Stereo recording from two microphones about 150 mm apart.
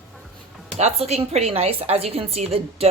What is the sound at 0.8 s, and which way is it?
A woman's voice, 45° right (ahead or behind).